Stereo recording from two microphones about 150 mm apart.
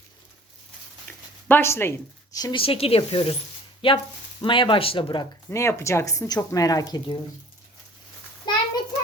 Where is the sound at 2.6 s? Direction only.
40° left (ahead or behind).